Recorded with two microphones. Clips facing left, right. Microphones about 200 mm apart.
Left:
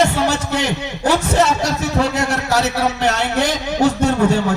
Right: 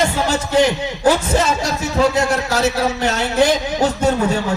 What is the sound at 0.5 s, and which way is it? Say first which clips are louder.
A man's voice: right 5 dB; 65° left (ahead or behind).